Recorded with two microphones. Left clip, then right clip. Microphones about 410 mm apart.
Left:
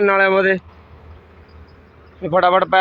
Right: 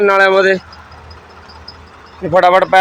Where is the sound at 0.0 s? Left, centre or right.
Left.